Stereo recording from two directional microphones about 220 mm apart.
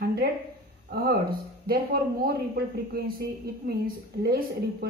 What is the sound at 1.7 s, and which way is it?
Speech, 45° right (ahead or behind).